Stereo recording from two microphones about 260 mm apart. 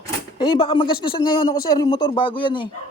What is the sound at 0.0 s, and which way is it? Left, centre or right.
Typewriter, centre.